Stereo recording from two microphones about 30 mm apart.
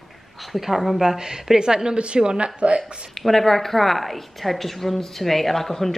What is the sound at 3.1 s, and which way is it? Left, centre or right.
A woman's voice, centre.